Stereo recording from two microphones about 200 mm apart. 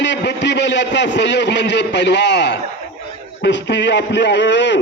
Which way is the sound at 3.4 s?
60° left (ahead or behind).